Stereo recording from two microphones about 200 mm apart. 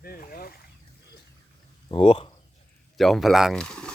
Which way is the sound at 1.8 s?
25° left (ahead or behind).